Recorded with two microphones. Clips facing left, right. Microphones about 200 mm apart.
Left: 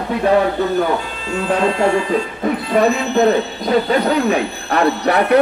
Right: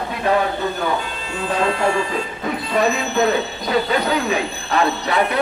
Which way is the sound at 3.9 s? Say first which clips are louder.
Left 4 dB; 55° left (ahead or behind).